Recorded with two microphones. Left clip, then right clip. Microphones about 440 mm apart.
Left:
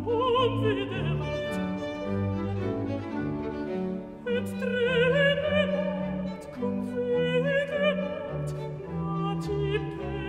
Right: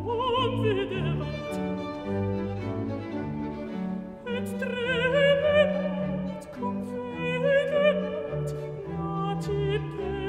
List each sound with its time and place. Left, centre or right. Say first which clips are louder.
0.2 s opera: left 1 dB; right
4.3 s music: left 2 dB; right
7.2 s music: right 3 dB; right
9.2 s music: right 1 dB; right